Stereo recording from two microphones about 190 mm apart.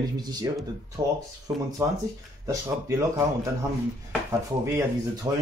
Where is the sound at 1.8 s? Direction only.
15° right (ahead or behind).